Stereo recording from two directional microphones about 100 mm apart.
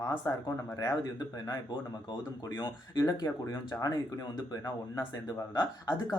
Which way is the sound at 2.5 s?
50° left (ahead or behind).